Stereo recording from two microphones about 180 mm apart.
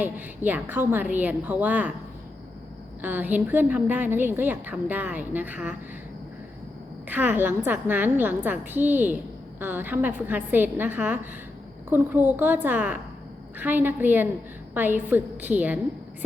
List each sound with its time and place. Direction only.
0.0 s a woman's voice: 10° right (ahead or behind)
3.0 s a woman's voice: 10° right (ahead or behind)
7.1 s a woman's voice: 10° right (ahead or behind)